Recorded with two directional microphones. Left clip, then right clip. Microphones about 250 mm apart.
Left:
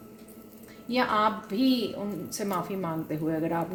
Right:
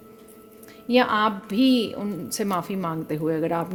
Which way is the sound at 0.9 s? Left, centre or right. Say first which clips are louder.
Right 5 dB; right.